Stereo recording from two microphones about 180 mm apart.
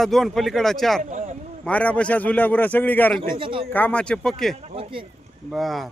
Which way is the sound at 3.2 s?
30° right (ahead or behind).